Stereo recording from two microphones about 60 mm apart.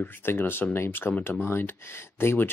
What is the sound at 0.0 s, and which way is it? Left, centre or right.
Speech, left.